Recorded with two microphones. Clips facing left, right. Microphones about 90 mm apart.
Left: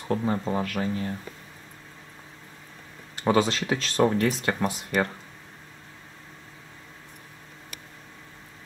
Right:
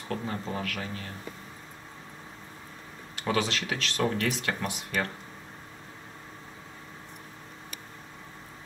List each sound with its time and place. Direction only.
0.1 s speech: 30° left (ahead or behind)
3.2 s speech: 35° left (ahead or behind)